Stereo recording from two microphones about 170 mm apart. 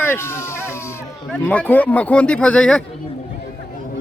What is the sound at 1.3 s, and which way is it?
Speech, 10° left (ahead or behind).